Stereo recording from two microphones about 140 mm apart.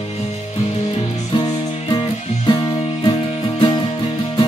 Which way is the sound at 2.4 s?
30° left (ahead or behind).